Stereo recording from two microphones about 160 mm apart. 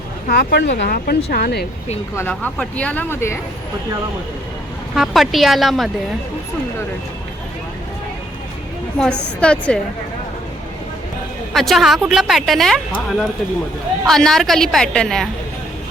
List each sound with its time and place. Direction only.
0.3 s speech: 90° left
2.1 s speech: 10° left (ahead or behind)
4.9 s a woman's voice: centre (ahead or behind)
9.4 s speech: 5° left (ahead or behind)
11.5 s a woman's voice: centre (ahead or behind)